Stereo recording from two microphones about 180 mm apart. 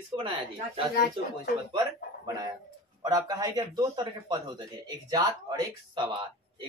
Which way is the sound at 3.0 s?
20° right (ahead or behind).